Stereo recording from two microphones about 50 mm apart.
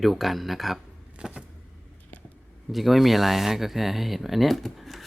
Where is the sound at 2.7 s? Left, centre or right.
Centre.